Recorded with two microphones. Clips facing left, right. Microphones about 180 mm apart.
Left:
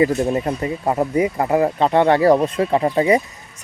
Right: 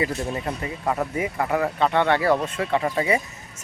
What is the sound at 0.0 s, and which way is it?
Speech, 35° left (ahead or behind).